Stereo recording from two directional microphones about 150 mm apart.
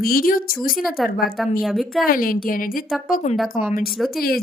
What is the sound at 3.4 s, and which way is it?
Speech, 10° right (ahead or behind).